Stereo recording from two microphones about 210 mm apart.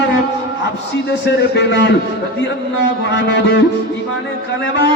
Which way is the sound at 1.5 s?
55° left (ahead or behind).